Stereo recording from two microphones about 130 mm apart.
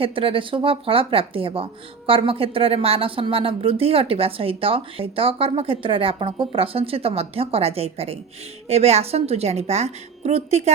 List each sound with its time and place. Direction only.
0.0 s speech: 45° right (ahead or behind)